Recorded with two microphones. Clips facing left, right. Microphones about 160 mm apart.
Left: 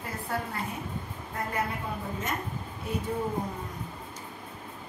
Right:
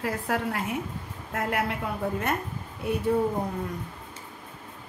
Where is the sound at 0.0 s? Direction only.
90° right; by 2.3 s 70° right (ahead or behind).